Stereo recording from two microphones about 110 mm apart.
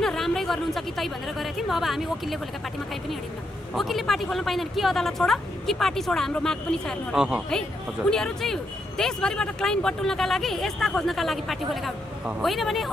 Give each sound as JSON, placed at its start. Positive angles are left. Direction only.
{"t": 0.0, "sound": "speech", "side_deg": 5}
{"t": 3.7, "sound": "speech", "side_deg": 0}
{"t": 7.2, "sound": "a woman's voice", "side_deg": -10}
{"t": 8.1, "sound": "speech", "side_deg": 5}